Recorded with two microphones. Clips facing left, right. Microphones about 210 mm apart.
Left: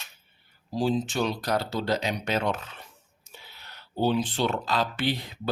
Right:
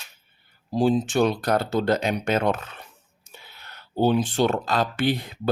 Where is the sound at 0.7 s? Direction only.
55° right (ahead or behind).